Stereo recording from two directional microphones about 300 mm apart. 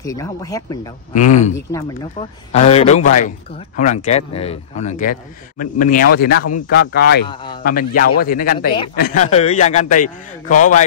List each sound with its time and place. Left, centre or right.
0.0 s speech: centre
1.1 s speech: left
1.7 s speech: centre